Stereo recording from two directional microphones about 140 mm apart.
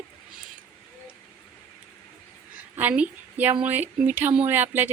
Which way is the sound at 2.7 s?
10° right (ahead or behind).